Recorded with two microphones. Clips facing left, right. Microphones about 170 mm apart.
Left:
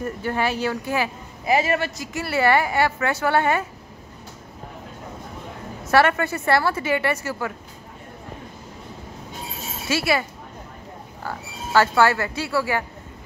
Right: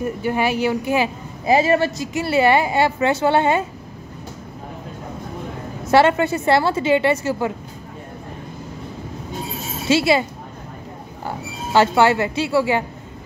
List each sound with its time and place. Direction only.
0.0 s speech: 15° right (ahead or behind)
5.9 s speech: 20° right (ahead or behind)
9.8 s speech: 20° right (ahead or behind)
11.2 s speech: 20° right (ahead or behind)